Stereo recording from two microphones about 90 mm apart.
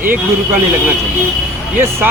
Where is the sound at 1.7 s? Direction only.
20° right (ahead or behind).